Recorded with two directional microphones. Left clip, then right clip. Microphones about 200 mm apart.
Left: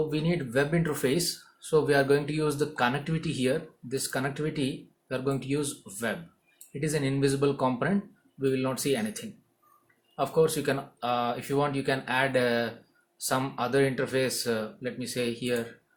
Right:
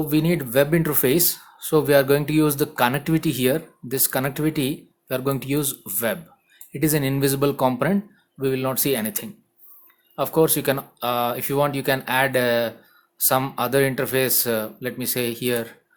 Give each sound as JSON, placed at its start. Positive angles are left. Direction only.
{"t": 0.1, "sound": "speech", "side_deg": -55}